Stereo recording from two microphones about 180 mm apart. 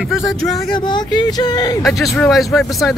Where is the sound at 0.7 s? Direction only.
25° left (ahead or behind).